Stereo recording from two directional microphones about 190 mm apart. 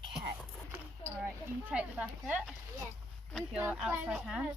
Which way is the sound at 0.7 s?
10° right (ahead or behind).